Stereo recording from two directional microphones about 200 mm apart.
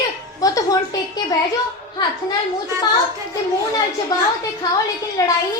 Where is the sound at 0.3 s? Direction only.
15° left (ahead or behind).